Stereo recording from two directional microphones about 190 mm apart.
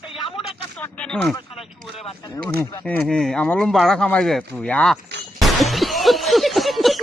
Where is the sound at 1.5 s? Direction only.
30° left (ahead or behind).